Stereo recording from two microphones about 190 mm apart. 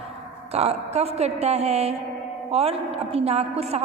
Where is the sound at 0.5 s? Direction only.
35° right (ahead or behind).